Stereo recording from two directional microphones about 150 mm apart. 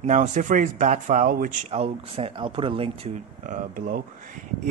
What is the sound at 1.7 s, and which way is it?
Speech, 40° right (ahead or behind).